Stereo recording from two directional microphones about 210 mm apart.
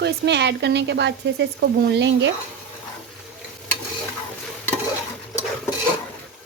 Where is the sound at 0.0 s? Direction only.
55° right (ahead or behind).